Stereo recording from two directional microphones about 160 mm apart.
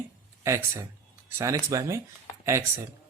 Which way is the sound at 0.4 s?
20° right (ahead or behind).